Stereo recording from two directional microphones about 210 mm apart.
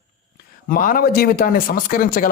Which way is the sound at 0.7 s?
40° left (ahead or behind).